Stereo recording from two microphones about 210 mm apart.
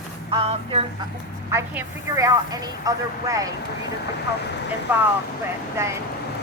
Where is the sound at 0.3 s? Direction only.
25° right (ahead or behind).